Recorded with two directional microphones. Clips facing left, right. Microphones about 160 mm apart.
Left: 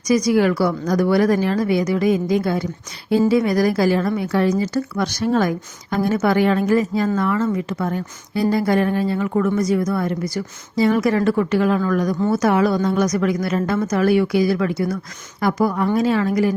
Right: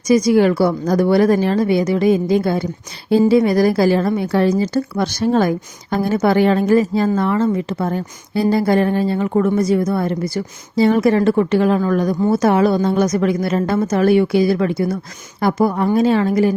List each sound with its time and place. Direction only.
0.1 s a woman's voice: 25° right (ahead or behind)